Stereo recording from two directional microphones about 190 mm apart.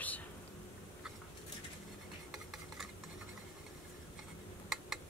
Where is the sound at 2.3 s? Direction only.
Centre (ahead or behind).